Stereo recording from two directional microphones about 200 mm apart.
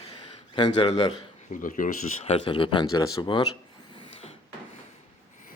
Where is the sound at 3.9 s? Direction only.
25° left (ahead or behind).